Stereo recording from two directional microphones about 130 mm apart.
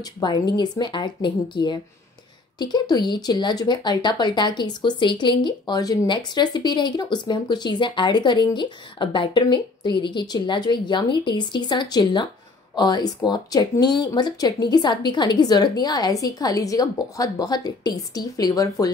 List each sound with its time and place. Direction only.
0.0 s speech: 35° left (ahead or behind)